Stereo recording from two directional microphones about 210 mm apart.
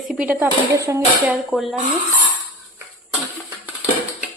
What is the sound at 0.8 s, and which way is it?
Speech, 15° right (ahead or behind).